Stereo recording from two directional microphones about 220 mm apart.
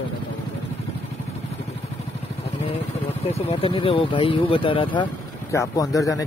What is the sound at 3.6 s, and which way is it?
A man's voice, 25° left (ahead or behind).